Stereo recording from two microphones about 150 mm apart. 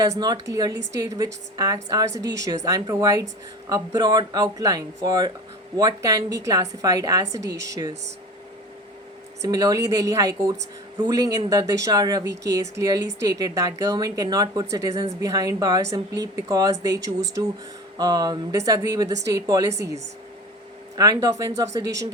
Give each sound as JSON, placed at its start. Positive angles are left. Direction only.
{"t": 0.2, "sound": "speech", "side_deg": -25}
{"t": 9.4, "sound": "speech", "side_deg": -25}